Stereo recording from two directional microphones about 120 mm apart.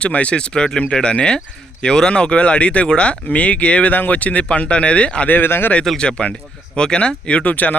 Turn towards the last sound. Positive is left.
turn(degrees=15)  # may be behind; listen again after turning